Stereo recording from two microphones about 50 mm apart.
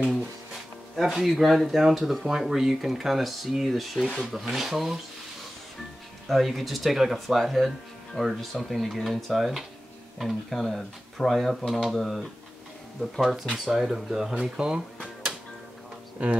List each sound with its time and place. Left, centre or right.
0.9 s speech: centre
6.2 s speech: centre
14.4 s drawer open or close: centre
16.2 s speech: right